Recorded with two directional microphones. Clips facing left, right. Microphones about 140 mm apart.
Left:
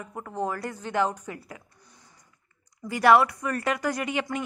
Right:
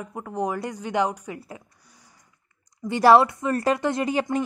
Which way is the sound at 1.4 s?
25° right (ahead or behind).